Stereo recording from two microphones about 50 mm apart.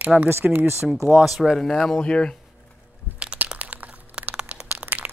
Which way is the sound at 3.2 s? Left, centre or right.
Right.